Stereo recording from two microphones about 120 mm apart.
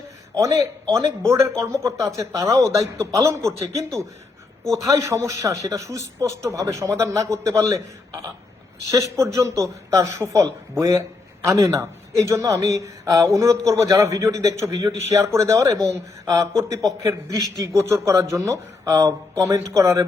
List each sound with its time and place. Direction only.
0.3 s speech: 30° right (ahead or behind)
8.9 s a man's voice: 25° right (ahead or behind)